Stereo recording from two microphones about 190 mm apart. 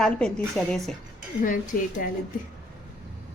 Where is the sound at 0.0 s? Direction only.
5° left (ahead or behind).